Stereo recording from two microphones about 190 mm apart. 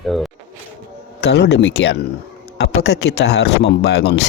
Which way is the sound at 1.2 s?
65° left (ahead or behind).